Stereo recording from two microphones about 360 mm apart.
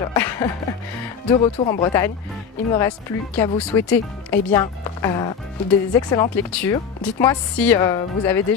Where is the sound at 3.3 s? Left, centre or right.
Centre.